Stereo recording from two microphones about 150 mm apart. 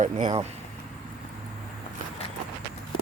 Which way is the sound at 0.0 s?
55° right (ahead or behind).